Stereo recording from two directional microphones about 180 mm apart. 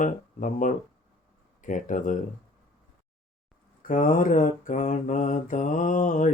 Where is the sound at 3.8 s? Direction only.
50° left (ahead or behind).